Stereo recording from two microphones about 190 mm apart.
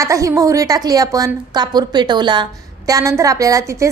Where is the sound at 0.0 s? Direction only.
15° right (ahead or behind).